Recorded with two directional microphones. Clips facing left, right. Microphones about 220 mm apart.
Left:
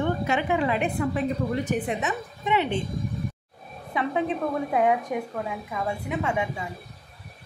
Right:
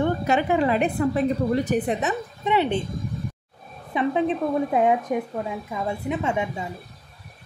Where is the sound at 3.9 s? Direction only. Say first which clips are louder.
Right 4 dB; 20° right (ahead or behind).